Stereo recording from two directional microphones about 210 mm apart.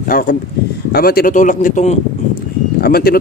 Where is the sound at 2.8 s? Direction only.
45° left (ahead or behind).